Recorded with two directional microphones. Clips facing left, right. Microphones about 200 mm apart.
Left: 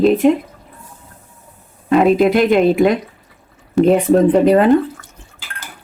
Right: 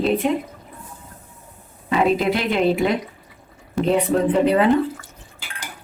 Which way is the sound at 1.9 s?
50° left (ahead or behind).